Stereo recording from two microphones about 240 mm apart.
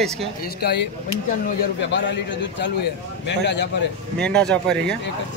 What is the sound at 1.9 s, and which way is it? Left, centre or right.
A man's voice, left.